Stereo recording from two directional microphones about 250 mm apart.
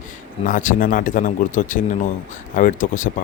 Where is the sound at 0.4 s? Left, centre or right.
Left.